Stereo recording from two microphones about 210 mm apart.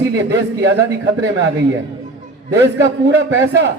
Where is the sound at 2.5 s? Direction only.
55° right (ahead or behind).